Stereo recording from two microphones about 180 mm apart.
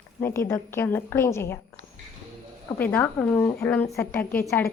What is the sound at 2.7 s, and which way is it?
A woman's voice, 10° left (ahead or behind).